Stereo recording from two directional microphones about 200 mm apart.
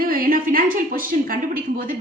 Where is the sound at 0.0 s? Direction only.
45° right (ahead or behind).